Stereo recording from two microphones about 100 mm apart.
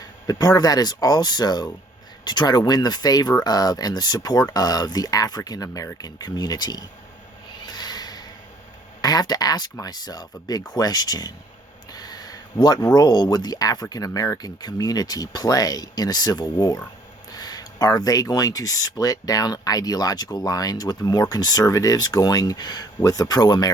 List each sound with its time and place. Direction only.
0.3 s speech: 40° left (ahead or behind)
7.6 s a sound: 45° left (ahead or behind)
9.0 s speech: 40° left (ahead or behind)